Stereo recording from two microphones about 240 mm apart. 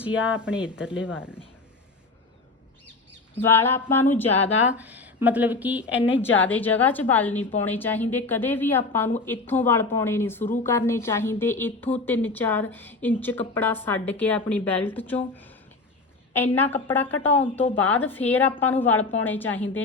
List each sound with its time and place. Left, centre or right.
0.0 s speech: centre
3.4 s a woman's voice: centre
4.8 s speech: centre
5.9 s a woman's voice: left
6.5 s a woman's voice: centre